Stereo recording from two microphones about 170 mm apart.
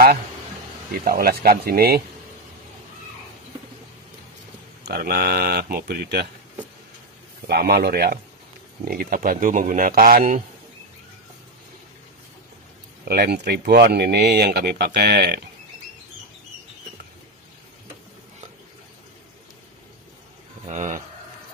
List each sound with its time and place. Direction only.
0.9 s speech: 60° right (ahead or behind)
4.8 s speech: 65° right (ahead or behind)
7.4 s speech: 65° right (ahead or behind)
13.1 s speech: 65° right (ahead or behind)
20.6 s speech: 45° right (ahead or behind)